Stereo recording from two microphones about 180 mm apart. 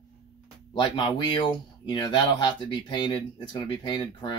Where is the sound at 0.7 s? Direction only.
25° left (ahead or behind).